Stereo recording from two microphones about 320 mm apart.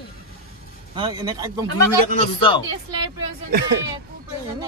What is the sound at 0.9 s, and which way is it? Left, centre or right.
Speech, centre.